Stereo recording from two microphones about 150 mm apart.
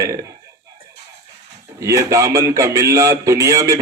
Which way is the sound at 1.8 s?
20° right (ahead or behind).